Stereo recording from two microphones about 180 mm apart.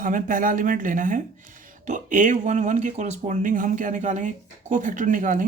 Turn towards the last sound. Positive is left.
turn(degrees=-45)  # may be behind; listen again after turning